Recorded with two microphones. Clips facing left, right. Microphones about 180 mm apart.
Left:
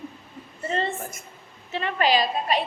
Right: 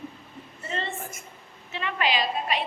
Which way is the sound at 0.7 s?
40° left (ahead or behind).